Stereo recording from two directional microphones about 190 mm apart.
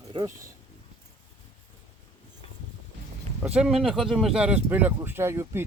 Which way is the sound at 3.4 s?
5° right (ahead or behind).